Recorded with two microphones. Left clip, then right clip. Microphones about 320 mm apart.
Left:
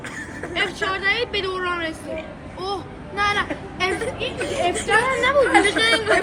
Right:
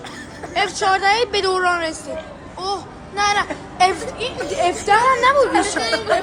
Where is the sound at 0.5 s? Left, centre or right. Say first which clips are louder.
Right 6 dB; right.